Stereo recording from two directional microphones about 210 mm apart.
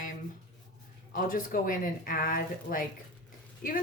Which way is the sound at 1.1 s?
40° left (ahead or behind).